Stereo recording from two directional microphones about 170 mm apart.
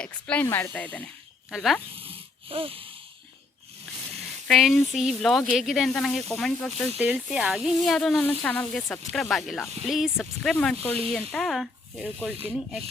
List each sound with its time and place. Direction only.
0.0 s speech: 5° left (ahead or behind)
2.0 s wheeze: 35° right (ahead or behind)
4.4 s speech: centre (ahead or behind)